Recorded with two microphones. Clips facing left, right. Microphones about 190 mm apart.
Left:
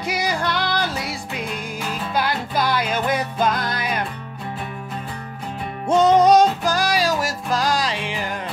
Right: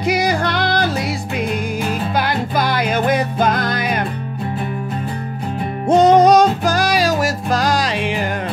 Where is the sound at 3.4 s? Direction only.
55° right (ahead or behind).